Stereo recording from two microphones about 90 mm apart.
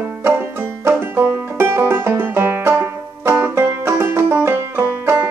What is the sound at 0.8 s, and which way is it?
Banjo, 25° right (ahead or behind).